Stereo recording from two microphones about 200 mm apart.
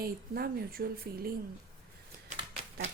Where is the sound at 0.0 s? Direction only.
50° right (ahead or behind).